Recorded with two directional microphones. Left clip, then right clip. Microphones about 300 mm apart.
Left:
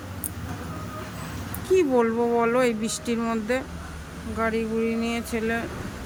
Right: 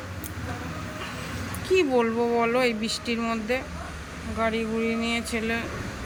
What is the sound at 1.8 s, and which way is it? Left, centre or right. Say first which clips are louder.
Speech: left 1 dB; centre.